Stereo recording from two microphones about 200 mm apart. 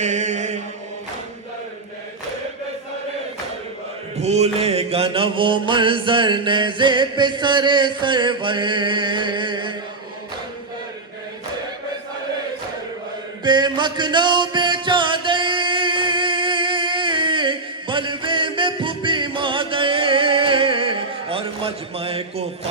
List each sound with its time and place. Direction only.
0.0 s chant: 35° right (ahead or behind)
4.2 s mantra: 35° right (ahead or behind)
13.4 s music: 20° right (ahead or behind)